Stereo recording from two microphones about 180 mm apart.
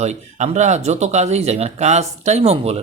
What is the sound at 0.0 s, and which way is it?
A man's voice, 40° right (ahead or behind).